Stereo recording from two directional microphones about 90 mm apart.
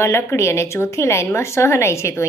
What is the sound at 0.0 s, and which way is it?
A woman's voice, 30° left (ahead or behind).